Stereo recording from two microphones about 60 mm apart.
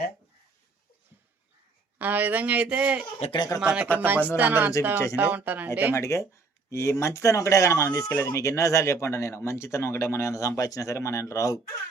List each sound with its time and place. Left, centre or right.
2.0 s speech: right
5.9 s speech: left
8.1 s speech: left
8.4 s speech: left